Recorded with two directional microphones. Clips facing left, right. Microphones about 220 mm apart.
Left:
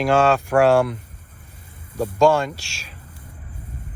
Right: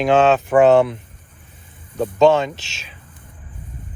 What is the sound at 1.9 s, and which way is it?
Speech, 10° left (ahead or behind).